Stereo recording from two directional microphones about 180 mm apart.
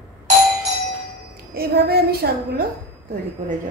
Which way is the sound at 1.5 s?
60° right (ahead or behind).